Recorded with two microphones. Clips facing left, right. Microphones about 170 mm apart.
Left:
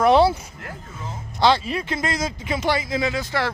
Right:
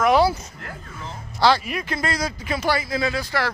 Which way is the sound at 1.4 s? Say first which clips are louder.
Even; 25° left (ahead or behind).